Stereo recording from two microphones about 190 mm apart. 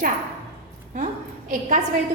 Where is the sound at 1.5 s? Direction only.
40° right (ahead or behind).